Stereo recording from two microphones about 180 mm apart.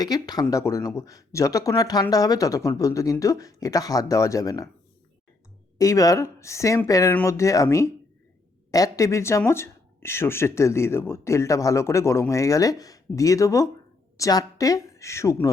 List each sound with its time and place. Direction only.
0.0 s speech: 20° left (ahead or behind)
5.7 s speech: 20° left (ahead or behind)